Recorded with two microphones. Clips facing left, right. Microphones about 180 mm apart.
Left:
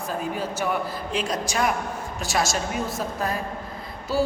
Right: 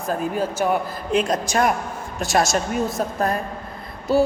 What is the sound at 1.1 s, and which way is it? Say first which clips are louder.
A man's voice: right 8 dB; 50° right (ahead or behind).